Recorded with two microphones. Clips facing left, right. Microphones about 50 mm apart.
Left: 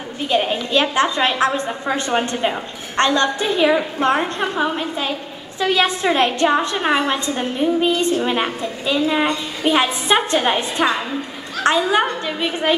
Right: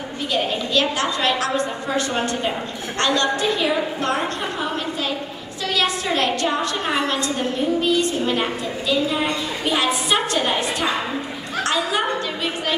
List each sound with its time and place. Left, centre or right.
0.3 s a woman's voice: left